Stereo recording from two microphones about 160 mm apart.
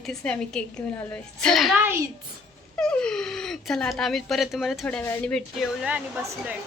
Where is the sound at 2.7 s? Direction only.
5° left (ahead or behind).